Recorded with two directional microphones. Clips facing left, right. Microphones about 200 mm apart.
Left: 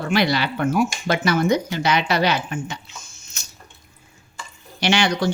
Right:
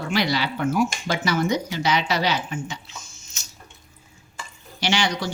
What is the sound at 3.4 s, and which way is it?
Water, 55° left (ahead or behind).